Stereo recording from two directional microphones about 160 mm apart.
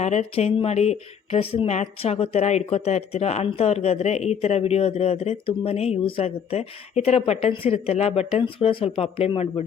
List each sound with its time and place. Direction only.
0.0 s speech: 45° left (ahead or behind)